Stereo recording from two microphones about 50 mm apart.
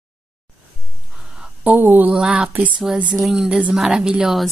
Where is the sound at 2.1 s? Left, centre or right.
Centre.